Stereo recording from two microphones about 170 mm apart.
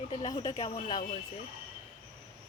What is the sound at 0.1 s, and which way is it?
Speech, 30° left (ahead or behind).